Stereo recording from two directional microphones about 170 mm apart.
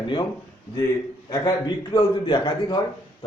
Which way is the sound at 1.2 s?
20° left (ahead or behind).